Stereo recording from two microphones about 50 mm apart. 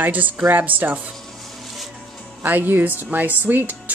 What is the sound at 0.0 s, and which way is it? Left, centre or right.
Speech, right.